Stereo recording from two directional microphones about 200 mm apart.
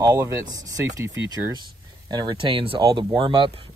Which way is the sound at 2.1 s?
20° right (ahead or behind).